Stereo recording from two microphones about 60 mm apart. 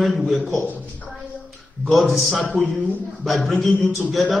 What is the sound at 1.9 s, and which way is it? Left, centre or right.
A woman's voice, centre.